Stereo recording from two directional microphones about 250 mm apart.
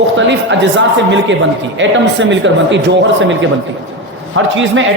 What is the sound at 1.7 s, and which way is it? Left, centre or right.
A man's voice, right.